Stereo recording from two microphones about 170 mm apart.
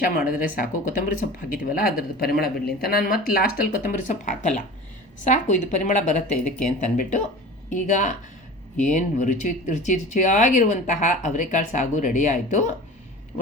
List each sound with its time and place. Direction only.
0.0 s speech: 55° left (ahead or behind)